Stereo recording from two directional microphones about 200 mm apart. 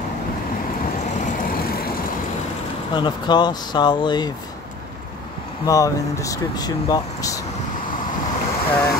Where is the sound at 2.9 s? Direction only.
20° left (ahead or behind).